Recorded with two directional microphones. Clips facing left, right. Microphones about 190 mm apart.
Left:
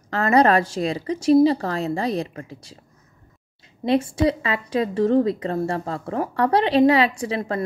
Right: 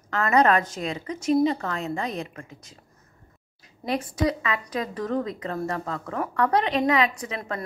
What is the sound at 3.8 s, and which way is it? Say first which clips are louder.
Speech: left 6 dB; 25° left (ahead or behind).